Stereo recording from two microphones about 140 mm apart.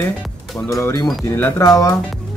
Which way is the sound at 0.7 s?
20° left (ahead or behind).